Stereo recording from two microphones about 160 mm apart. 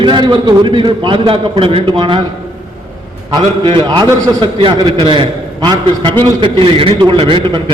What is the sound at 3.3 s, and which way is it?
A man's voice, 30° right (ahead or behind).